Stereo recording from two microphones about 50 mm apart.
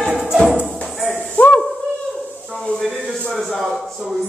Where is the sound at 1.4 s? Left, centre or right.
Left.